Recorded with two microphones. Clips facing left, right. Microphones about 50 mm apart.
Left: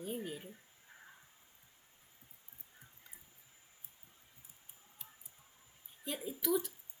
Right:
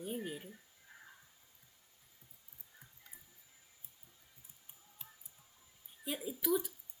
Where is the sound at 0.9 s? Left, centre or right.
Left.